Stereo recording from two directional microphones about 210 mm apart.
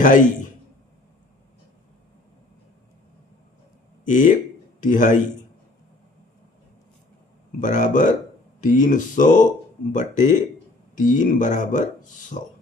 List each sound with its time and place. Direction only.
0.0 s speech: 40° left (ahead or behind)
4.1 s speech: 35° left (ahead or behind)
7.6 s speech: 35° left (ahead or behind)